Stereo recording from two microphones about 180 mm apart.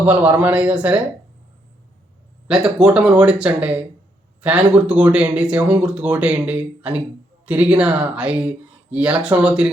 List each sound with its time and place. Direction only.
0.0 s speech: 10° right (ahead or behind)
2.5 s speech: 5° right (ahead or behind)